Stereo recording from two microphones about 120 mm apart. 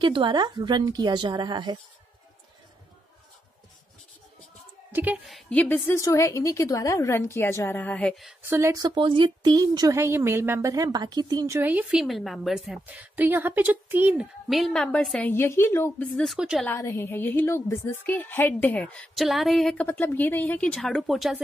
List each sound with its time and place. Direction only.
0.0 s speech: 40° right (ahead or behind)
4.9 s a woman's voice: 15° right (ahead or behind)
5.5 s a woman's voice: 15° left (ahead or behind)
8.4 s speech: 20° right (ahead or behind)
8.8 s speech: 40° right (ahead or behind); by 11.7 s 25° right (ahead or behind)
11.7 s a woman's voice: 5° right (ahead or behind)
14.5 s a woman's voice: 5° left (ahead or behind)
15.3 s a woman's voice: 20° left (ahead or behind)
16.3 s a woman's voice: 5° right (ahead or behind)
16.6 s a woman's voice: 20° left (ahead or behind)
19.9 s a woman's voice: 15° left (ahead or behind); by 21.4 s centre (ahead or behind)